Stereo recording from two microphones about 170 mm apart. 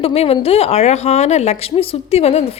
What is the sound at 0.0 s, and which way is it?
A woman's voice, 35° left (ahead or behind).